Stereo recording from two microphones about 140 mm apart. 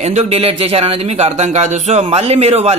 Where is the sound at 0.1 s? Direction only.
45° right (ahead or behind).